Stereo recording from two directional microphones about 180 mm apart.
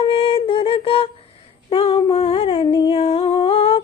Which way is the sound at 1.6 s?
30° left (ahead or behind).